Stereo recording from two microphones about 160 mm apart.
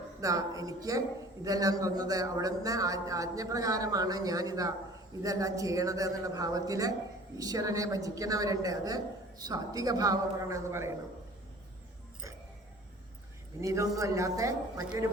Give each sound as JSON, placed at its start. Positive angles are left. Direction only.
{"t": 0.2, "sound": "a man's voice", "side_deg": -20}
{"t": 13.6, "sound": "a man's voice", "side_deg": -20}